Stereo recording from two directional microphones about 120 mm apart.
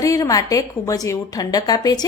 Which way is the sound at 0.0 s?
30° left (ahead or behind).